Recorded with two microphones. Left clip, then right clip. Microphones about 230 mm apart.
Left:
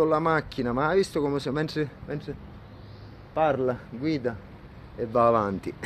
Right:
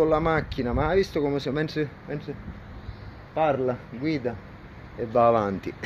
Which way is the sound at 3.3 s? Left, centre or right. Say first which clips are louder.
Even; centre.